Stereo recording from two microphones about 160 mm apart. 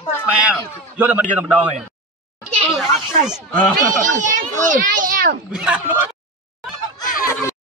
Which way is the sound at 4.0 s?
50° right (ahead or behind).